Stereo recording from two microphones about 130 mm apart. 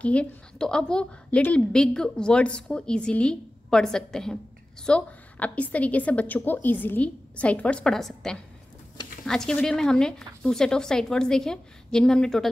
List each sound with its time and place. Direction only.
0.0 s a woman's voice: 10° left (ahead or behind)